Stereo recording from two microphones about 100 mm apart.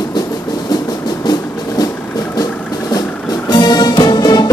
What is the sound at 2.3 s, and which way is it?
Vehicle, 40° left (ahead or behind).